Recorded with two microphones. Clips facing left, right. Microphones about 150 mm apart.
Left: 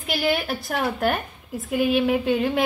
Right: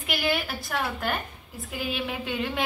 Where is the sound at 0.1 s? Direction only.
40° left (ahead or behind).